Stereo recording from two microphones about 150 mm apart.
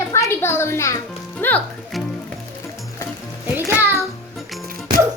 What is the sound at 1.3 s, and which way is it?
Music, 10° left (ahead or behind).